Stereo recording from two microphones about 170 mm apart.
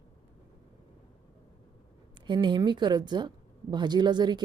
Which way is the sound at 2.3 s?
25° right (ahead or behind).